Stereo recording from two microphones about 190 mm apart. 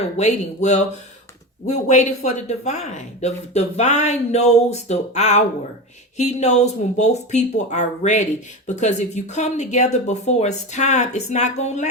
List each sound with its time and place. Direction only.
0.0 s speech: 35° left (ahead or behind)